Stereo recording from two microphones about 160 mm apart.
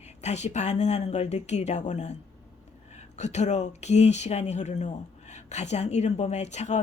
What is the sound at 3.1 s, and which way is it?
Speech, 45° left (ahead or behind).